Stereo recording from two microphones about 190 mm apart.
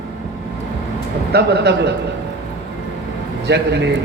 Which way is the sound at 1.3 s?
60° right (ahead or behind).